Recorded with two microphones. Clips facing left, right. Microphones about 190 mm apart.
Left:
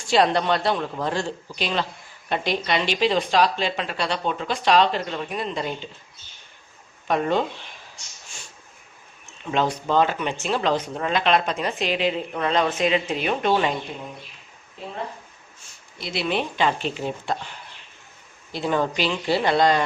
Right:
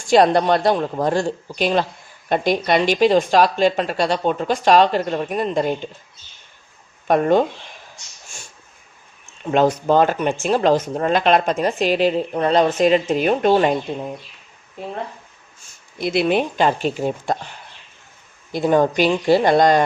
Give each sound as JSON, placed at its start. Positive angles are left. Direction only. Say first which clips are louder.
{"t": 0.1, "sound": "speech", "louder": "right 6 dB", "side_deg": -45}
{"t": 7.1, "sound": "speech", "louder": "right 7 dB", "side_deg": -50}
{"t": 9.4, "sound": "speech", "louder": "right 7 dB", "side_deg": -50}
{"t": 14.8, "sound": "speech", "louder": "right 6 dB", "side_deg": -50}
{"t": 16.0, "sound": "speech", "louder": "right 8 dB", "side_deg": -55}
{"t": 18.5, "sound": "speech", "louder": "right 7 dB", "side_deg": -45}